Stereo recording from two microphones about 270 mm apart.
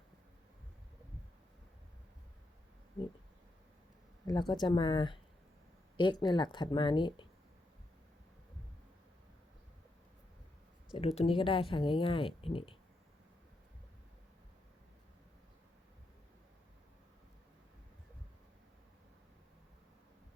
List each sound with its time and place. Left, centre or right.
4.3 s speech: centre
10.9 s speech: left